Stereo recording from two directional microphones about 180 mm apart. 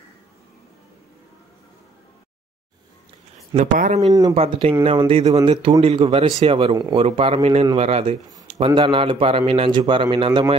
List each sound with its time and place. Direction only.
3.5 s speech: 45° right (ahead or behind)
4.3 s a man's voice: 35° right (ahead or behind)